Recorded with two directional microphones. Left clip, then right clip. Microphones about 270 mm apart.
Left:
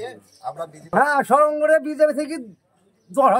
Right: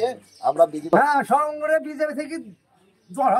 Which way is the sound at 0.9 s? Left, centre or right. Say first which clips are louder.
Left 1 dB; centre.